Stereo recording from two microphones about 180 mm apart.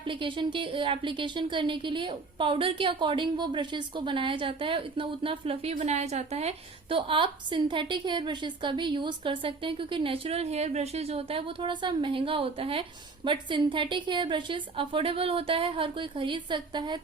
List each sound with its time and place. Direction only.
0.0 s a woman's voice: 30° right (ahead or behind)